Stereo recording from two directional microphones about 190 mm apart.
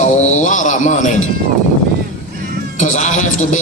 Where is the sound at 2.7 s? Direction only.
40° left (ahead or behind).